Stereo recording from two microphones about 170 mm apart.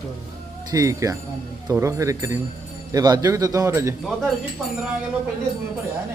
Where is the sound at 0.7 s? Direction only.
20° right (ahead or behind).